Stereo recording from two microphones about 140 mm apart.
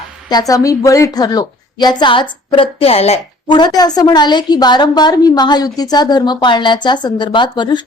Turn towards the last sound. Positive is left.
turn(degrees=35)  # may be behind; listen again after turning